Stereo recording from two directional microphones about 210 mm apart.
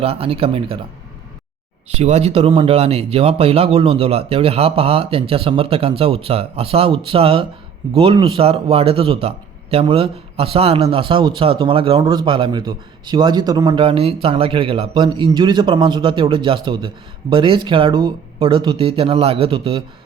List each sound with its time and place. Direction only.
0.0 s speech: 25° right (ahead or behind)
2.0 s speech: 30° right (ahead or behind)